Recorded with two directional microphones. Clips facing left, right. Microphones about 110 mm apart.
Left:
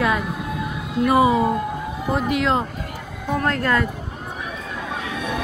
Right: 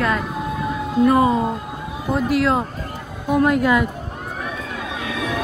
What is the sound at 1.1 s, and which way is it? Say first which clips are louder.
Speech: left 2 dB; 10° left (ahead or behind).